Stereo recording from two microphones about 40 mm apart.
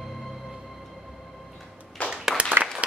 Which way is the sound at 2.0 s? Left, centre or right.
Left.